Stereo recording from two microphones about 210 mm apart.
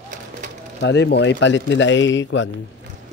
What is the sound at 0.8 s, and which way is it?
A man's voice, 55° left (ahead or behind).